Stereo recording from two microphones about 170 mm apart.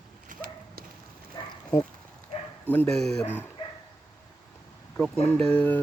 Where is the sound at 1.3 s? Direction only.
25° left (ahead or behind).